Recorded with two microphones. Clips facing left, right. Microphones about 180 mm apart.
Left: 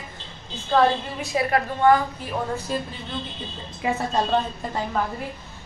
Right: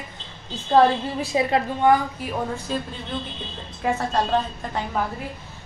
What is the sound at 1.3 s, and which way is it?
Speech, 15° right (ahead or behind).